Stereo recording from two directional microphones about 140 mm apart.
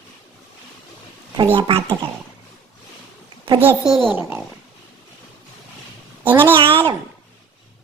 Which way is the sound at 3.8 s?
Centre (ahead or behind).